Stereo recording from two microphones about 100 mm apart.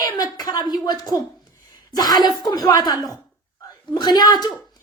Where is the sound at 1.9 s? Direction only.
40° left (ahead or behind).